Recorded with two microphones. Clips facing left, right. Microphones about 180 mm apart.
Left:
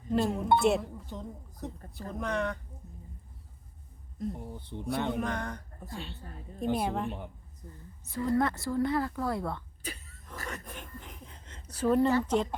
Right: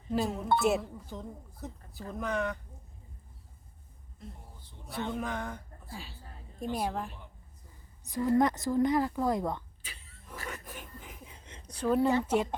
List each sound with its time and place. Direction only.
0.1 s speech: centre (ahead or behind)
4.5 s speech: 60° left (ahead or behind)
5.2 s speech: 5° right (ahead or behind)
8.0 s speech: 15° right (ahead or behind)
9.8 s a sound: 45° left (ahead or behind)
10.4 s a sound: 5° right (ahead or behind)
11.7 s speech: centre (ahead or behind)
12.0 s speech: 10° right (ahead or behind)